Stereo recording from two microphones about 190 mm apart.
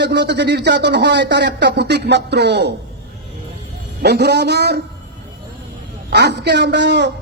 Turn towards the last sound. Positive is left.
turn(degrees=-65)  # may be behind; listen again after turning